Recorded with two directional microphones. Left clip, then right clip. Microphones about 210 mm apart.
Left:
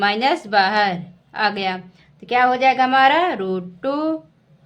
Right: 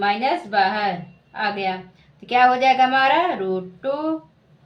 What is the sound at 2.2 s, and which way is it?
A woman's voice, 15° left (ahead or behind).